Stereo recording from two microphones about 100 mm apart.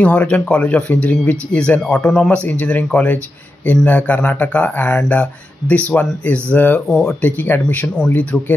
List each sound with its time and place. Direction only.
0.0 s speech: 15° left (ahead or behind)
7.2 s speech: 20° left (ahead or behind)